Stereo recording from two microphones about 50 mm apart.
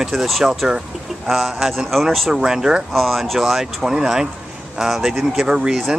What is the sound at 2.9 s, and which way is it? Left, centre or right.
Speech, centre.